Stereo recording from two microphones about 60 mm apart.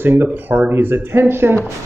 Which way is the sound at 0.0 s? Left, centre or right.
Right.